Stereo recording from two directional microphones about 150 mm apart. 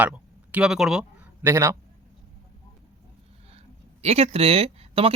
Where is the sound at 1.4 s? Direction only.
20° right (ahead or behind).